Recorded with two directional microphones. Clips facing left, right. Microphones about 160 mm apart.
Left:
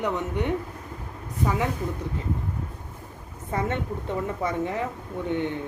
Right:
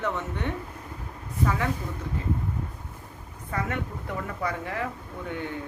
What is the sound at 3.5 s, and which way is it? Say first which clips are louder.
Speech: left 3 dB; 25° left (ahead or behind).